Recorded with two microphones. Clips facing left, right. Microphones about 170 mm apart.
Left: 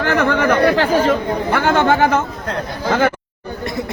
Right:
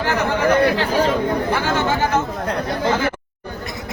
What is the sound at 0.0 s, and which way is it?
Speech, 60° left (ahead or behind).